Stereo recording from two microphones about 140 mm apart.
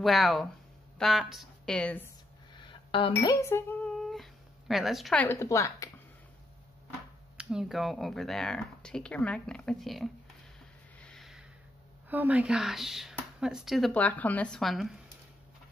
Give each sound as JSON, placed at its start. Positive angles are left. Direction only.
{"t": 0.0, "sound": "a woman's voice", "side_deg": 0}
{"t": 2.5, "sound": "a sound", "side_deg": 35}
{"t": 3.3, "sound": "a woman's voice", "side_deg": 20}
{"t": 4.0, "sound": "cat", "side_deg": 0}
{"t": 5.1, "sound": "a woman's voice", "side_deg": 15}
{"t": 7.3, "sound": "speech", "side_deg": -5}
{"t": 11.0, "sound": "a sound", "side_deg": 5}
{"t": 12.1, "sound": "speech", "side_deg": -10}